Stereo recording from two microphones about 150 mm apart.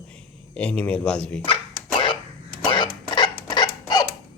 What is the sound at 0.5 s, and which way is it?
Speech, 10° left (ahead or behind).